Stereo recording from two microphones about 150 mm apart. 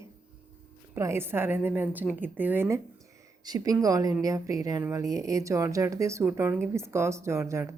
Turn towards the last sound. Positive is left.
turn(degrees=-20)  # may be behind; listen again after turning